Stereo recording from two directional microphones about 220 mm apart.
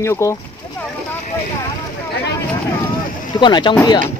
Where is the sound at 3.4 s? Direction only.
20° left (ahead or behind).